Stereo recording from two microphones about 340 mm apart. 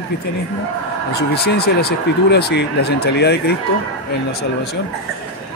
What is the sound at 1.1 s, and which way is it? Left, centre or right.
Speech, left.